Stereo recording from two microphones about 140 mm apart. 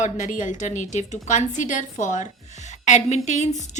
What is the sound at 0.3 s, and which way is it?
A woman's voice, 65° left (ahead or behind).